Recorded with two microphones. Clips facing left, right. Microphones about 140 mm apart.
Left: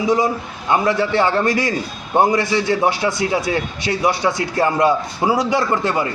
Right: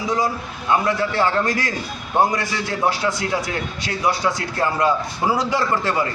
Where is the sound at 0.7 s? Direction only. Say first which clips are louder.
Left 3 dB; 25° left (ahead or behind).